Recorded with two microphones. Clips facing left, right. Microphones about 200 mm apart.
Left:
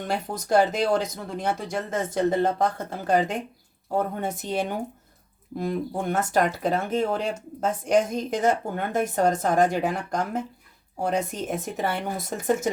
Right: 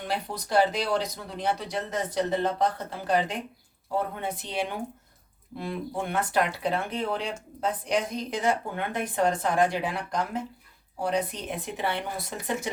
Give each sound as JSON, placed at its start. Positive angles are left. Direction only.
{"t": 0.1, "sound": "speech", "side_deg": 45}